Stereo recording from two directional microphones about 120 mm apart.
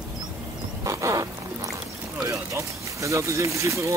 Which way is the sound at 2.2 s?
25° right (ahead or behind).